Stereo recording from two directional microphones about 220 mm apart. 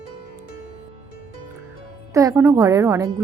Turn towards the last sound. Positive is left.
turn(degrees=-15)  # may be behind; listen again after turning